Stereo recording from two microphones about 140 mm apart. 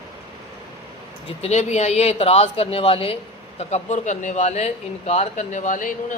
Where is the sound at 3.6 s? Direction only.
55° left (ahead or behind).